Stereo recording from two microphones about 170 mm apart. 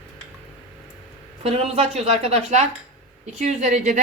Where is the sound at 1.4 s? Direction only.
35° right (ahead or behind).